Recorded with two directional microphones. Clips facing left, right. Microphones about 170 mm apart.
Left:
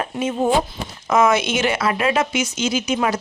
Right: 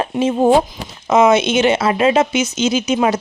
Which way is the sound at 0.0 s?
30° right (ahead or behind).